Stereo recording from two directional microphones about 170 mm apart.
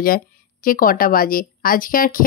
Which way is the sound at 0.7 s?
55° left (ahead or behind).